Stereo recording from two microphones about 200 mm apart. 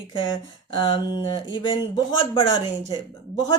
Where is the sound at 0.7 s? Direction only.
25° left (ahead or behind).